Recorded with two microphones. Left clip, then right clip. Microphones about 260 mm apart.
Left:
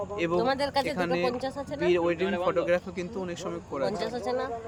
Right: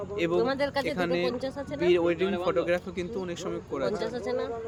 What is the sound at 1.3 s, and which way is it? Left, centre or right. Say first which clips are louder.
Speech: left 1 dB; centre.